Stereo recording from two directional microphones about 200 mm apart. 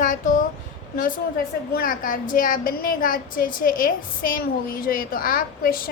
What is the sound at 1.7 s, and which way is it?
A woman's voice, 45° left (ahead or behind).